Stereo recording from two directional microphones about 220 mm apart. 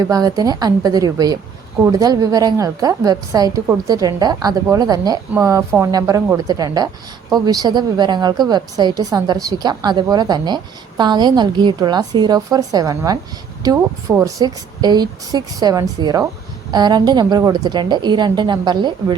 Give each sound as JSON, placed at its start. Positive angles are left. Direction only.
{"t": 0.0, "sound": "a woman's voice", "side_deg": -15}